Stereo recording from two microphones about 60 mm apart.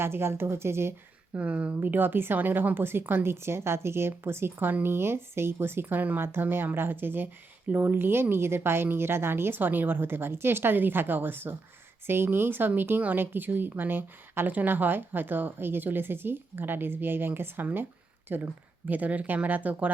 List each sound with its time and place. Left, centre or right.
0.0 s a woman's voice: right
1.4 s speech: right